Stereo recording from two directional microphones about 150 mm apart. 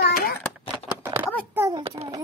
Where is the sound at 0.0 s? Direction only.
90° left.